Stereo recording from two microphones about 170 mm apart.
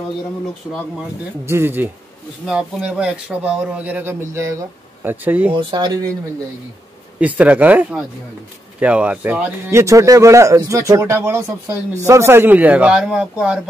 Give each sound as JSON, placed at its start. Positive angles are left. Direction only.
{"t": 1.4, "sound": "a man's voice", "side_deg": -15}
{"t": 5.5, "sound": "speech", "side_deg": -25}
{"t": 7.2, "sound": "a man's voice", "side_deg": -10}